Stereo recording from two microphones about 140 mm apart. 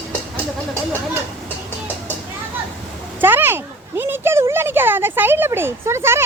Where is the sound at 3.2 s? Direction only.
15° right (ahead or behind).